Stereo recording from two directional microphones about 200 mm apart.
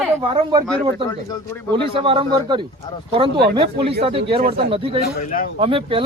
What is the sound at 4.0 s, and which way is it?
Speech, 25° right (ahead or behind).